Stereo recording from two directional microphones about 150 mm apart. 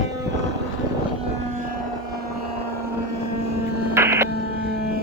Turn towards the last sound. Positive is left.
turn(degrees=-15)  # may be behind; listen again after turning